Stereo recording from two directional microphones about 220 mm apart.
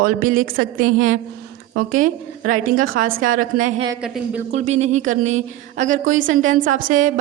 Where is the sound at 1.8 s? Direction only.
35° right (ahead or behind).